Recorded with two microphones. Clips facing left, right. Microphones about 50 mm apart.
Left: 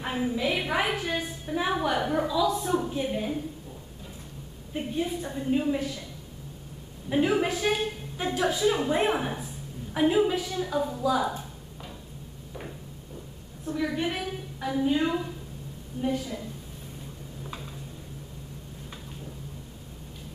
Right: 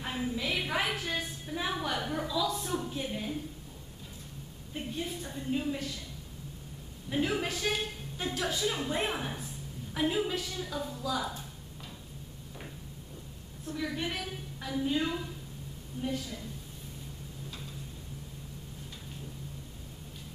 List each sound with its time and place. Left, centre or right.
0.0 s a woman's voice: centre
4.7 s a woman's voice: centre
7.1 s a woman's voice: centre
13.7 s a woman's voice: centre